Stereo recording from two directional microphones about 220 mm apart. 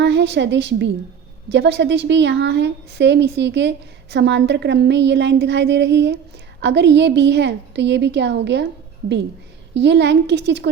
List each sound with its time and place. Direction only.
0.0 s a woman's voice: 50° right (ahead or behind)
9.7 s a woman's voice: 50° right (ahead or behind)